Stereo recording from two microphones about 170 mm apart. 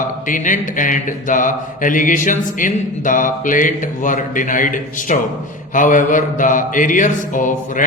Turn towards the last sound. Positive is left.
turn(degrees=50)  # may be behind; listen again after turning